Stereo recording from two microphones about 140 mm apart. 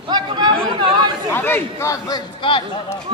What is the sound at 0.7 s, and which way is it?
Chatter, 35° right (ahead or behind).